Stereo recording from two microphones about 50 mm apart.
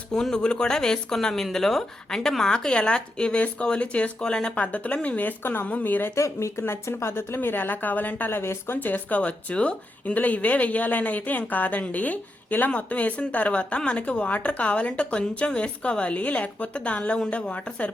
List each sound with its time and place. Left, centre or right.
0.1 s speech: centre; by 5.3 s left
5.4 s a woman's voice: left
6.1 s speech: left
6.6 s a woman's voice: left
8.8 s speech: left